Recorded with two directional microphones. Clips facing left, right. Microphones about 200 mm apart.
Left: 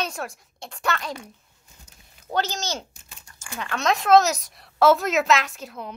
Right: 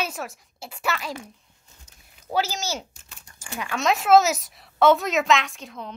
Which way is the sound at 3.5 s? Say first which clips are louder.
Even; 10° right (ahead or behind).